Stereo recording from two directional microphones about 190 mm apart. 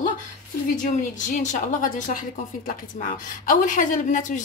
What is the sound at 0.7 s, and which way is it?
A woman's voice, 40° left (ahead or behind).